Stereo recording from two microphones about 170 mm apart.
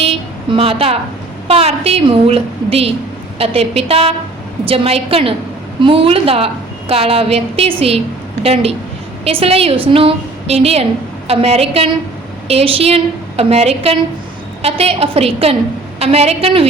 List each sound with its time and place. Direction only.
0.0 s a woman's voice: 35° right (ahead or behind)
9.2 s a woman's voice: 35° right (ahead or behind)